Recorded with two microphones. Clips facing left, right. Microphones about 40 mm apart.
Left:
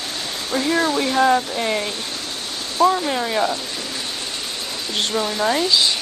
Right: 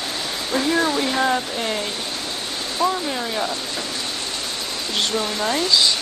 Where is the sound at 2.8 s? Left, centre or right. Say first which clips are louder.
Left 5 dB; centre.